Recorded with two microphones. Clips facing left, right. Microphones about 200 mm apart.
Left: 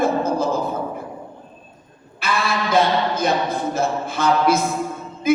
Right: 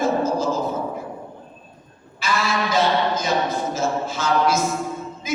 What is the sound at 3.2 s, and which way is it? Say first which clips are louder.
A man's voice: left 2 dB; 60° left (ahead or behind).